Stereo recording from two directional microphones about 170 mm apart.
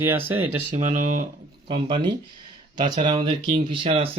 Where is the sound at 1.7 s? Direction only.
30° right (ahead or behind).